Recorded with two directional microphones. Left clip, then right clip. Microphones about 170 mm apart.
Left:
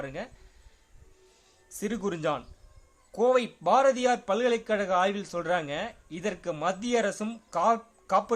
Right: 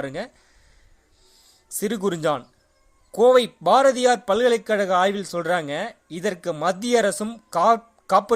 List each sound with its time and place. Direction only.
0.0 s speech: 35° right (ahead or behind)
1.8 s a man's voice: 30° right (ahead or behind)